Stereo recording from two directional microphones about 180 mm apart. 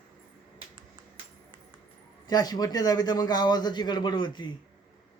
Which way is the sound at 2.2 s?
20° left (ahead or behind).